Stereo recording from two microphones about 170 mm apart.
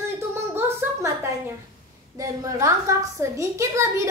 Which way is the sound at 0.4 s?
15° right (ahead or behind).